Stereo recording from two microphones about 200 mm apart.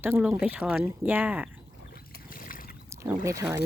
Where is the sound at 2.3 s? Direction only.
45° left (ahead or behind).